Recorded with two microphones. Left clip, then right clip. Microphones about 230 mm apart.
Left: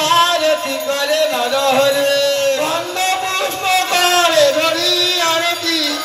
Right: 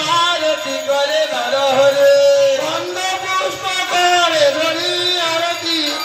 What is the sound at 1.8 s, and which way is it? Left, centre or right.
Music, left.